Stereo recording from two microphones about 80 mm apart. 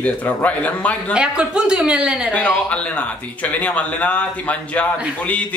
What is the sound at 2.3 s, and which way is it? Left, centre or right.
A man's voice, centre.